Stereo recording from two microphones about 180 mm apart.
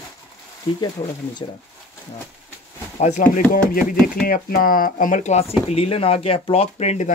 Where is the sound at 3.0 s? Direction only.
45° left (ahead or behind).